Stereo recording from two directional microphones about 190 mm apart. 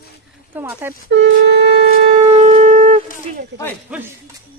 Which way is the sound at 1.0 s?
65° right (ahead or behind).